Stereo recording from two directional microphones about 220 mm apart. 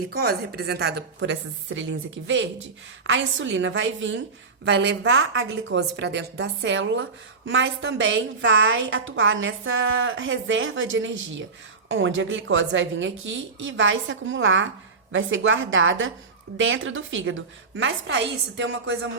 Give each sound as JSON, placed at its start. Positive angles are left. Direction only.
{"t": 0.1, "sound": "a woman's voice", "side_deg": -45}